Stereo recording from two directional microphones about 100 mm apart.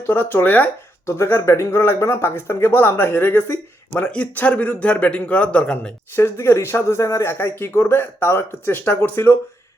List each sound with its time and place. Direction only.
0.0 s speech: 20° left (ahead or behind)
6.1 s speech: 25° left (ahead or behind)